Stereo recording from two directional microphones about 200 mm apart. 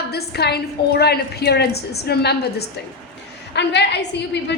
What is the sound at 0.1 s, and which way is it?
A woman's voice, 55° left (ahead or behind).